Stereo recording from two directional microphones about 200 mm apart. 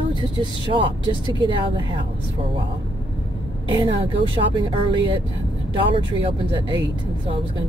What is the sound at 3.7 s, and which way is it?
Speech, 25° right (ahead or behind).